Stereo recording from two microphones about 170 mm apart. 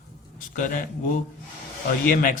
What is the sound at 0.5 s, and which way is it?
Speech, 50° left (ahead or behind).